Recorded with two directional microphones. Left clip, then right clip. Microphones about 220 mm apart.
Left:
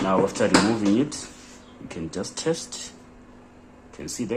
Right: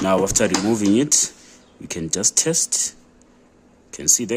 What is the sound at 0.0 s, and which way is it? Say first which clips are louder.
Speech: right 3 dB; 50° right (ahead or behind).